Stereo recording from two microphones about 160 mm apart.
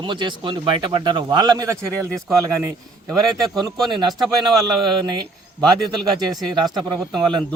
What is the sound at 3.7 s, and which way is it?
Speech, centre (ahead or behind).